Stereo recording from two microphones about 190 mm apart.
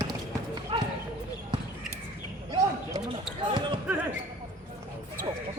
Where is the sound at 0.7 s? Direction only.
25° right (ahead or behind).